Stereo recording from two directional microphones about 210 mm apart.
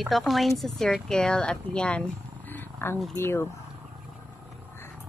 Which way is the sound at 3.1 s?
10° left (ahead or behind).